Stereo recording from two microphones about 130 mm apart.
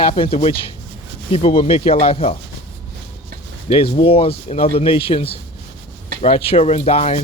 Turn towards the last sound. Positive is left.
turn(degrees=50)  # may be behind; listen again after turning